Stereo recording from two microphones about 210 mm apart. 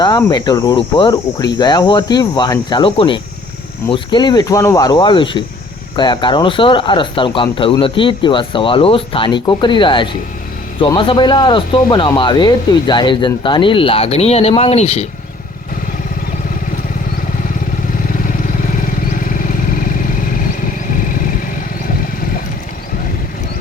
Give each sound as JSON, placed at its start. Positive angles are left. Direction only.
{"t": 0.0, "sound": "speech", "side_deg": 20}